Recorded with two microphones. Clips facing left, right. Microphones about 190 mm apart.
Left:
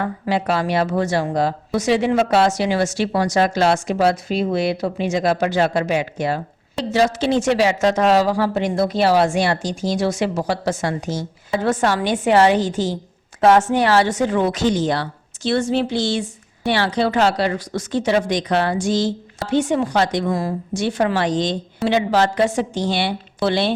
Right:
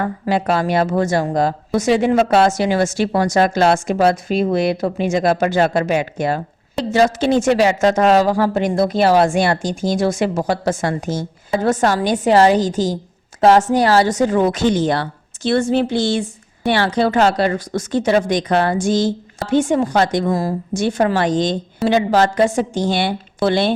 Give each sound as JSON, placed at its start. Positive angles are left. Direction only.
{"t": 0.0, "sound": "a woman's voice", "side_deg": -45}